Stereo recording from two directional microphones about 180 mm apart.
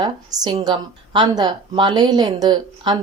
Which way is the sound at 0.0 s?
20° right (ahead or behind).